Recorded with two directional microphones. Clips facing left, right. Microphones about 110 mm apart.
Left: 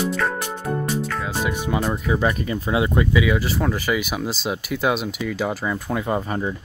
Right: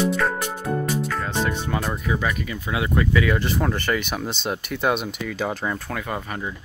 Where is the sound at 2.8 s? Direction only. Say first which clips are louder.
Right 1 dB; 20° left (ahead or behind); by 5.8 s centre (ahead or behind).